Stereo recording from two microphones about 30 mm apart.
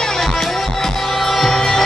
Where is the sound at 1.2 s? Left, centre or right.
Centre.